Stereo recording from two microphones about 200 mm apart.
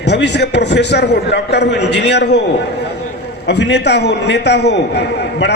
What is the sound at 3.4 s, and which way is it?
A man's voice, 60° left (ahead or behind).